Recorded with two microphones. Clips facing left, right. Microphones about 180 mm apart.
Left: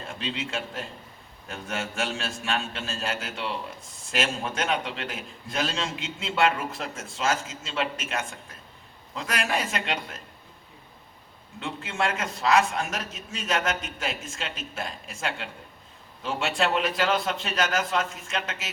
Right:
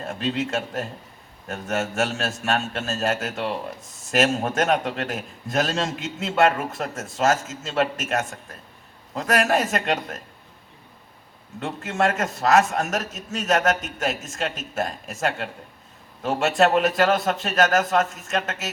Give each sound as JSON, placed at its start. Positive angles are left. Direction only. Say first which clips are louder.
{"t": 0.0, "sound": "a man's voice", "louder": "right 7 dB", "side_deg": -45}
{"t": 11.6, "sound": "a man's voice", "louder": "right 6 dB", "side_deg": -45}